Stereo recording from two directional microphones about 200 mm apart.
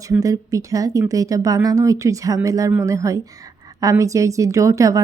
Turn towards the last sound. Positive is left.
turn(degrees=-15)  # may be behind; listen again after turning